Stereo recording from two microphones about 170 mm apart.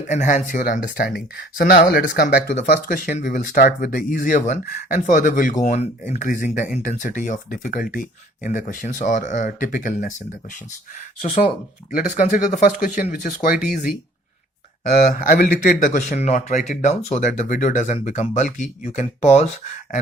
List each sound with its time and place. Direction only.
0.1 s speech: 45° left (ahead or behind); by 2.6 s 65° left (ahead or behind)
2.6 s speech: 55° left (ahead or behind)
11.2 s speech: 40° left (ahead or behind)
11.9 s speech: 50° left (ahead or behind)
14.9 s speech: 50° left (ahead or behind)